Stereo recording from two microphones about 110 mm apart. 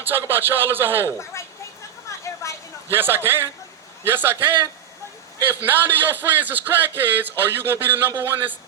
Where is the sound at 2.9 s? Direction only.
20° right (ahead or behind).